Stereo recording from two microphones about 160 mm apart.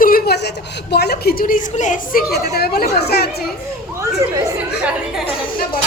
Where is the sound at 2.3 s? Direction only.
85° left.